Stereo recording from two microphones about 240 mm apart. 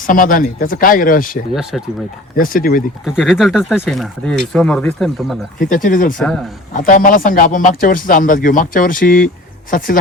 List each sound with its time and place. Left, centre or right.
0.1 s speech: left
3.2 s speech: centre
5.5 s speech: left
6.1 s speech: centre
6.7 s speech: left